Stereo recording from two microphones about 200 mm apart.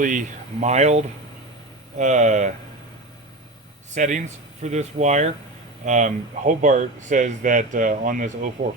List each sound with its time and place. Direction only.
0.0 s speech: 40° right (ahead or behind)
3.9 s speech: 35° right (ahead or behind)